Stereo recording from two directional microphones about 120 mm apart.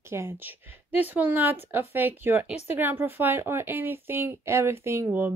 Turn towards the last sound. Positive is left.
turn(degrees=-15)  # may be behind; listen again after turning